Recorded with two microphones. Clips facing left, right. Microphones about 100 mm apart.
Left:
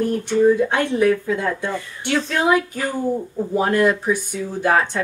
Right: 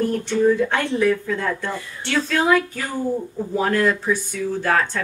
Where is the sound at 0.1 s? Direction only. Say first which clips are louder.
Left 2 dB; 15° left (ahead or behind).